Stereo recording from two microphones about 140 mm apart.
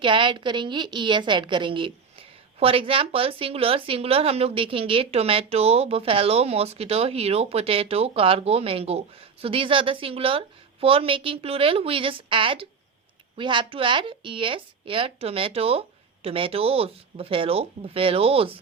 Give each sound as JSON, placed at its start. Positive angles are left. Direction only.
{"t": 0.0, "sound": "a woman's voice", "side_deg": -35}